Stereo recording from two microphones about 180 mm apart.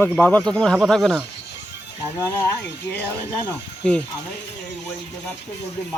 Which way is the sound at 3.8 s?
5° left (ahead or behind).